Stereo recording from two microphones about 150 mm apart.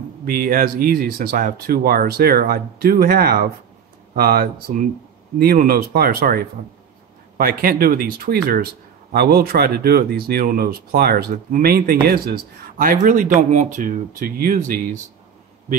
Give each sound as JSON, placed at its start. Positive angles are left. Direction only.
{"t": 0.2, "sound": "speech", "side_deg": -80}